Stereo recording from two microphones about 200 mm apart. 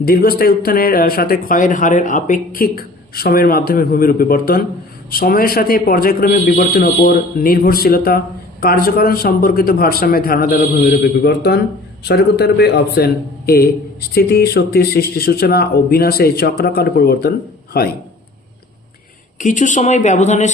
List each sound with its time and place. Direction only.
0.0 s a man's voice: 50° left (ahead or behind)
19.4 s speech: 40° left (ahead or behind)